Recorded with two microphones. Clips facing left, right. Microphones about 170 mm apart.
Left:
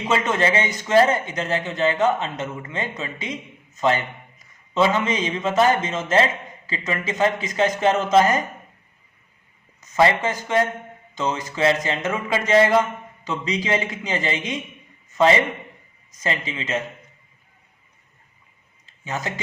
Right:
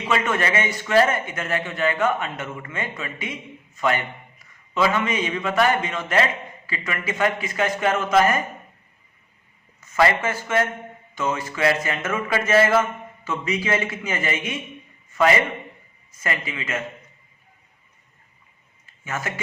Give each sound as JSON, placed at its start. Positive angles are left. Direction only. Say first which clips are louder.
{"t": 0.1, "sound": "a man's voice", "louder": "left 2 dB", "side_deg": 20}
{"t": 9.8, "sound": "speech", "louder": "left 1 dB", "side_deg": 20}
{"t": 16.1, "sound": "speech", "louder": "left 2 dB", "side_deg": 20}
{"t": 19.0, "sound": "speech", "louder": "left 1 dB", "side_deg": 20}